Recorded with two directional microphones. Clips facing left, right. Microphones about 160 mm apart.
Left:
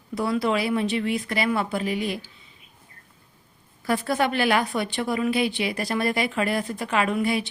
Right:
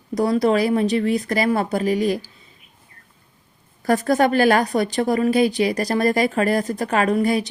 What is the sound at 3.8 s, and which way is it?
A woman's voice, 45° right (ahead or behind).